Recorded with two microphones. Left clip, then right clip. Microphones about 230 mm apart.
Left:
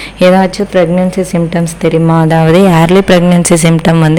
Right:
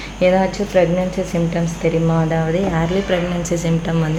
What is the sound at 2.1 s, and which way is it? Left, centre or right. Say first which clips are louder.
Speech: left 11 dB; left.